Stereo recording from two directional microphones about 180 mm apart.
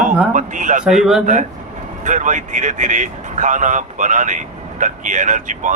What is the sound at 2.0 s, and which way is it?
Speech, 45° right (ahead or behind).